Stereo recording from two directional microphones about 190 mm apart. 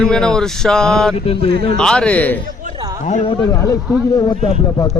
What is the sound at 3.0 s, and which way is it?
Speech, 40° left (ahead or behind).